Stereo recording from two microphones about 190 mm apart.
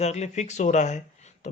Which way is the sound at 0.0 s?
35° left (ahead or behind).